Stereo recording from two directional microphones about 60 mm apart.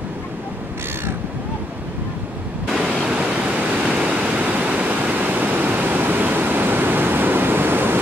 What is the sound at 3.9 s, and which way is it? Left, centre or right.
Pink noise, centre.